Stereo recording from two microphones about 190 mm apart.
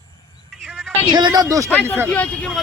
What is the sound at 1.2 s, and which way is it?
Speech, 20° right (ahead or behind).